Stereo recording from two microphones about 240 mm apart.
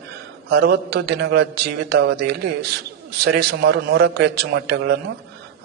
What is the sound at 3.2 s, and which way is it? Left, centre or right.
A man's voice, right.